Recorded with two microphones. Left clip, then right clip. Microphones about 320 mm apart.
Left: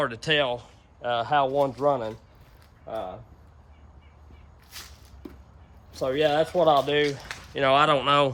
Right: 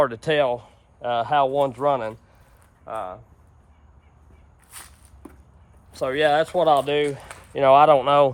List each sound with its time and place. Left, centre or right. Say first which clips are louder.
0.0 s speech: right 4 dB; centre
4.7 s walk: left 1 dB; centre
5.9 s speech: right 4 dB; right; by 8.3 s centre